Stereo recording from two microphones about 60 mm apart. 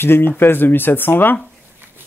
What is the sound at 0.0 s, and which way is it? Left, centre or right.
Speech, left.